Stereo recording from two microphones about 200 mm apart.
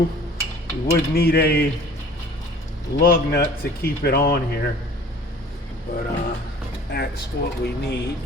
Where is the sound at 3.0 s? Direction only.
50° left (ahead or behind).